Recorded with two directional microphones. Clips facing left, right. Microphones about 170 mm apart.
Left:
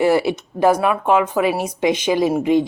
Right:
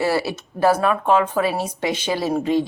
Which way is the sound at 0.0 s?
20° left (ahead or behind).